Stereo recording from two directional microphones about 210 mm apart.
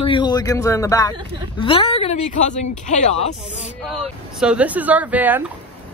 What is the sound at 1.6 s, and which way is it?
Speech, 25° left (ahead or behind).